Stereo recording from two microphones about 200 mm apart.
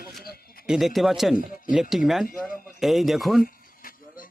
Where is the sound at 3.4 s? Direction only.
45° left (ahead or behind).